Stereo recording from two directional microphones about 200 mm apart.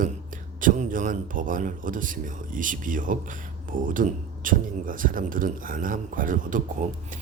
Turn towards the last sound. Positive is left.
turn(degrees=-40)  # may be behind; listen again after turning